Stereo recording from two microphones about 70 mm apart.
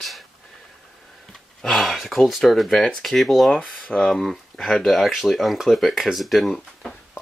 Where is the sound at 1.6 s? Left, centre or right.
Centre.